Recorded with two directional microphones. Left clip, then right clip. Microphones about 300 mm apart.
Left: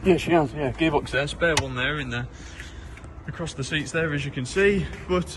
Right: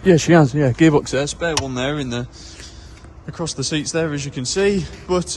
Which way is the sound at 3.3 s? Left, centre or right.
Centre.